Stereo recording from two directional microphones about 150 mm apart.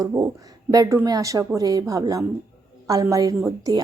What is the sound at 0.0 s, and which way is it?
A woman's voice, 20° right (ahead or behind).